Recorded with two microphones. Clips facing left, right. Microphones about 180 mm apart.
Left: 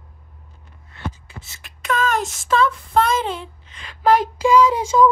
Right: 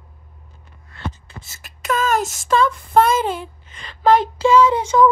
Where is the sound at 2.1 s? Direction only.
5° right (ahead or behind).